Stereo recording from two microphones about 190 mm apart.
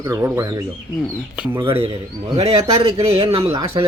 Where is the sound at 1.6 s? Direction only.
30° right (ahead or behind).